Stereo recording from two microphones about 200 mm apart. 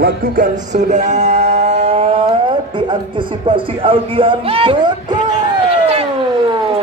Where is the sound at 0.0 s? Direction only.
45° right (ahead or behind); by 2.2 s 30° right (ahead or behind).